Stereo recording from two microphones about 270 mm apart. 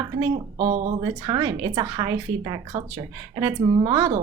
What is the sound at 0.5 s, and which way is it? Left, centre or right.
A woman's voice, right.